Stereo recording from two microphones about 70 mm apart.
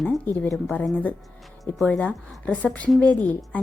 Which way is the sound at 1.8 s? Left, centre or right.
Centre.